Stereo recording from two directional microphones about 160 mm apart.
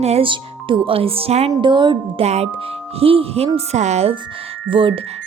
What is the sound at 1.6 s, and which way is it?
Speech, 30° right (ahead or behind).